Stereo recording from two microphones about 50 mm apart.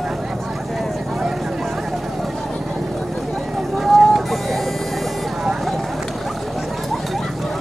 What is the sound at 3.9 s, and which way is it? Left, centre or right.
Vehicle, centre.